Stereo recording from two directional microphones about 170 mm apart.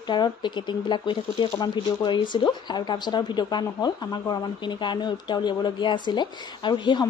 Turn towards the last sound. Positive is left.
turn(degrees=25)  # may be behind; listen again after turning